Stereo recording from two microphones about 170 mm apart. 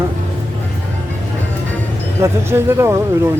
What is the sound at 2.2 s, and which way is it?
Speech, 15° right (ahead or behind).